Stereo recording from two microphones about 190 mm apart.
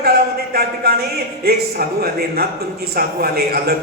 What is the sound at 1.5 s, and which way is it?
Speech, 55° right (ahead or behind).